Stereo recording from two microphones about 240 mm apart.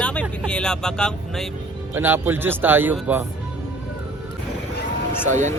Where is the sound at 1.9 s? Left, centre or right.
Centre.